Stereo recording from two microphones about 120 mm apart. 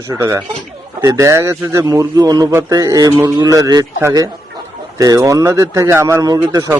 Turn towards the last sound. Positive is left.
turn(degrees=-30)  # may be behind; listen again after turning